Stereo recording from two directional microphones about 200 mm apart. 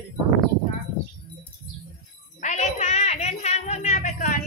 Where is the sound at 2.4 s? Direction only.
35° left (ahead or behind).